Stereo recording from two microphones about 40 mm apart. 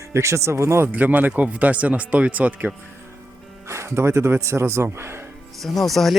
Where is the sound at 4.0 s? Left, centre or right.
Right.